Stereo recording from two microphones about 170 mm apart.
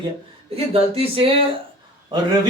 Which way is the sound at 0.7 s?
35° right (ahead or behind).